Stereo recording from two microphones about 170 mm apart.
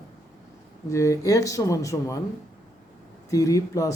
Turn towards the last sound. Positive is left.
turn(degrees=20)  # may be behind; listen again after turning